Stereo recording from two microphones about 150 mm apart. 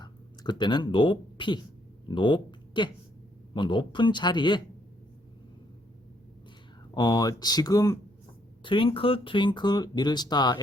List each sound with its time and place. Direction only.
0.0 s speech: 30° left (ahead or behind)
6.9 s speech: 25° left (ahead or behind)